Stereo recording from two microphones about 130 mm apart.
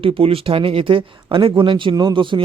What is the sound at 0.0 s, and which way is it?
A man's voice, 45° right (ahead or behind).